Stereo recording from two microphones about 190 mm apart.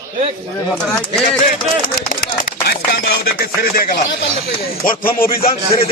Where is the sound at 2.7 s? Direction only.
55° left (ahead or behind).